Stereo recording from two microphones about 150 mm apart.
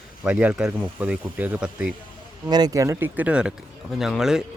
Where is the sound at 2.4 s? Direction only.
25° right (ahead or behind); by 4.4 s 5° right (ahead or behind).